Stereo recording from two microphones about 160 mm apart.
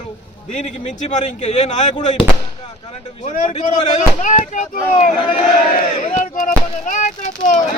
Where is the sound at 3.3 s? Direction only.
50° left (ahead or behind).